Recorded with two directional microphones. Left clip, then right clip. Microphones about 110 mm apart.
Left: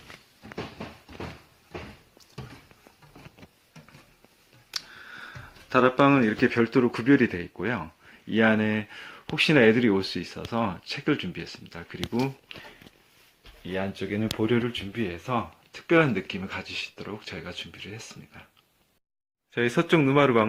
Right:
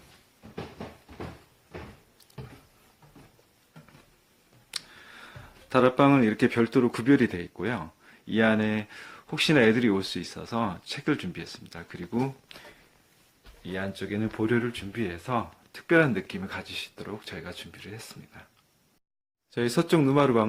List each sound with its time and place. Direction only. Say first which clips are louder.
4.7 s speech: left 3 dB; 20° right (ahead or behind); by 12.3 s 5° left (ahead or behind)
12.5 s speech: left 4 dB; 25° left (ahead or behind)
13.7 s speech: left 3 dB; 15° left (ahead or behind)
19.6 s a man's voice: left 1 dB; 15° right (ahead or behind)